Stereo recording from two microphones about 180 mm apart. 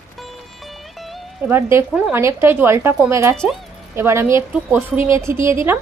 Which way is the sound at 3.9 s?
15° right (ahead or behind).